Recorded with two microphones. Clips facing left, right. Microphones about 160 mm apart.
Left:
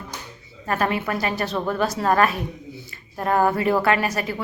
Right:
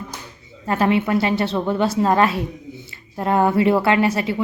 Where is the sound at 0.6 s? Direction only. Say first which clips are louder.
Right 5 dB; 25° right (ahead or behind).